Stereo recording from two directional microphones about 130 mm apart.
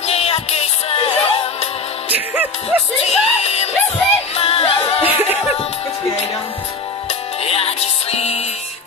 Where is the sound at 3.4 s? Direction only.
55° left (ahead or behind).